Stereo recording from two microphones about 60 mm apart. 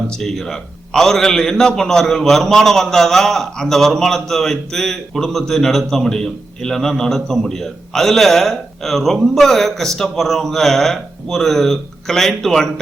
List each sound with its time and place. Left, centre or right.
0.1 s a man's voice: centre